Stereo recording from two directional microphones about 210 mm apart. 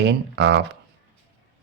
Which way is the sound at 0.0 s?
55° right (ahead or behind).